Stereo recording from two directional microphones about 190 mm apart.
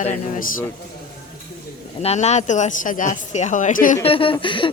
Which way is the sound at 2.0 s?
35° left (ahead or behind).